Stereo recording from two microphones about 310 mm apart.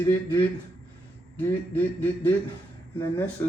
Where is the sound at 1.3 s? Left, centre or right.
Centre.